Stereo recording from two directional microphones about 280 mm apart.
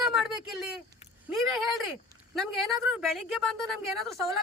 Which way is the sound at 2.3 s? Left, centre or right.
Centre.